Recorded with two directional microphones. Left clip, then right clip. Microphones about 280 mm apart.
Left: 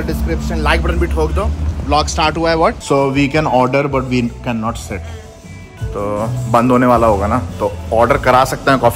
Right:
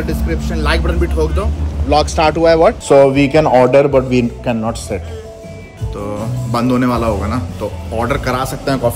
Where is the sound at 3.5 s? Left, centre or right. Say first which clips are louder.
Right 6 dB; left.